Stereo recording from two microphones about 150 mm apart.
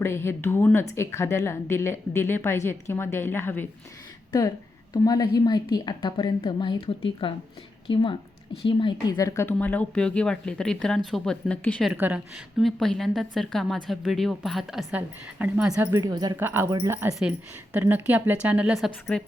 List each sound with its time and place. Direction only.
0.0 s a woman's voice: 15° left (ahead or behind)
11.9 s a woman's voice: 10° right (ahead or behind)
14.8 s a woman's voice: 10° right (ahead or behind)
15.8 s speech: 25° right (ahead or behind)
16.4 s a woman's voice: 15° right (ahead or behind)
16.6 s a woman's voice: 25° right (ahead or behind); by 18.9 s 5° right (ahead or behind)
19.1 s a woman's voice: 5° left (ahead or behind)